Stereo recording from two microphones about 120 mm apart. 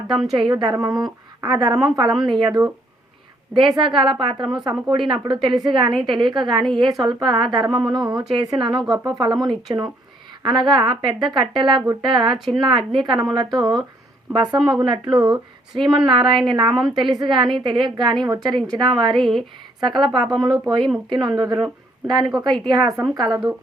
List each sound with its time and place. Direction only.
0.1 s speech: centre (ahead or behind)
0.6 s a woman's voice: 35° right (ahead or behind)
2.1 s speech: centre (ahead or behind)
2.4 s a woman's voice: 40° right (ahead or behind)
3.8 s a woman's voice: 40° right (ahead or behind)
12.3 s speech: centre (ahead or behind)
12.6 s a woman's voice: 40° right (ahead or behind)
19.1 s speech: centre (ahead or behind)
19.8 s a woman's voice: 40° right (ahead or behind)